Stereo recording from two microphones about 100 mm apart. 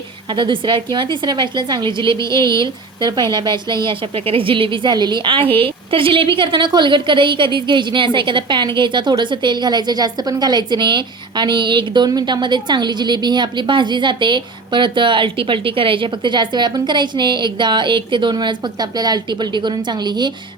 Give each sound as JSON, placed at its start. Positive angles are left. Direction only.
{"t": 0.3, "sound": "a woman's voice", "side_deg": -55}
{"t": 2.1, "sound": "a woman's voice", "side_deg": 35}
{"t": 2.5, "sound": "a woman's voice", "side_deg": -50}